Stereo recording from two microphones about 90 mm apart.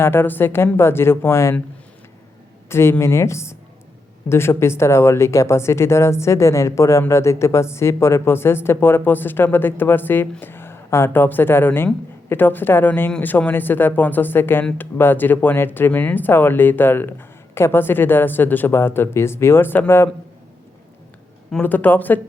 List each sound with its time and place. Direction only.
0.0 s speech: 25° left (ahead or behind)
2.6 s a woman's voice: 30° left (ahead or behind)
21.6 s speech: 20° left (ahead or behind)